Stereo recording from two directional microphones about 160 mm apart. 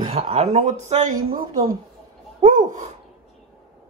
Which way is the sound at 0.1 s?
40° right (ahead or behind).